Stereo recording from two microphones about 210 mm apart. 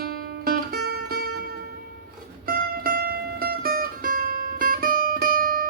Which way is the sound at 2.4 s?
45° right (ahead or behind).